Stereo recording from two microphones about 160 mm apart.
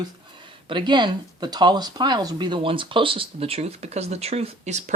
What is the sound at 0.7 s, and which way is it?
Speech, 30° right (ahead or behind).